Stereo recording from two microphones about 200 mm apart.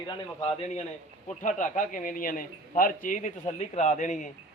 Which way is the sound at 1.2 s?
40° left (ahead or behind).